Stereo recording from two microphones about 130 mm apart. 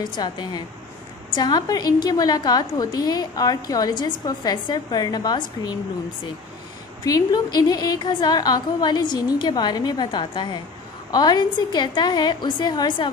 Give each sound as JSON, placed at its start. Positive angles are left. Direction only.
{"t": 0.0, "sound": "a woman's voice", "side_deg": 35}
{"t": 7.1, "sound": "a woman's voice", "side_deg": 30}